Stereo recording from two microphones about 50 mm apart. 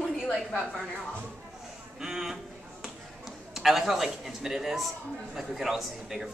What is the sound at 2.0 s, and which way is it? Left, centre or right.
Speech, centre.